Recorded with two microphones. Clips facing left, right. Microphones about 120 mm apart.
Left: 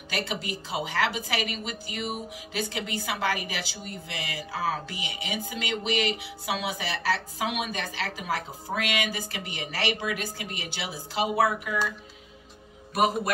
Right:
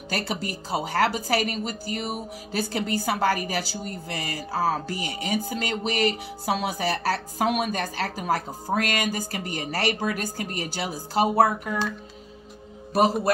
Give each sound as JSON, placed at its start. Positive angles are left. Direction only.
{"t": 0.1, "sound": "a woman's voice", "side_deg": -40}
{"t": 12.9, "sound": "a woman's voice", "side_deg": -35}